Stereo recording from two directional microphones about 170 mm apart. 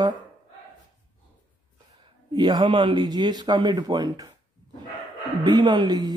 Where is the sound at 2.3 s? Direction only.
25° right (ahead or behind).